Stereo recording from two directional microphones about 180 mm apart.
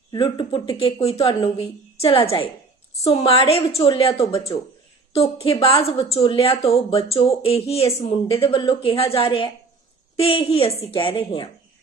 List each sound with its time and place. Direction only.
0.1 s a woman's voice: 25° left (ahead or behind)
3.8 s a woman's voice: 25° left (ahead or behind)